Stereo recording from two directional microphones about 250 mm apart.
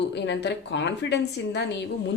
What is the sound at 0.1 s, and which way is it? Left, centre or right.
Speech, left.